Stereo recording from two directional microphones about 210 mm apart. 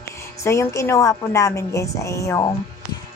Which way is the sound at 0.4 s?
15° left (ahead or behind).